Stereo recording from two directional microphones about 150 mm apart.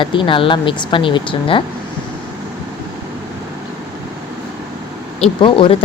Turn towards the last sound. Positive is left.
turn(degrees=35)  # may be behind; listen again after turning